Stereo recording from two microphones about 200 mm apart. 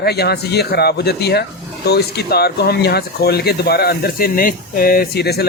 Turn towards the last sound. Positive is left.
turn(degrees=55)  # may be behind; listen again after turning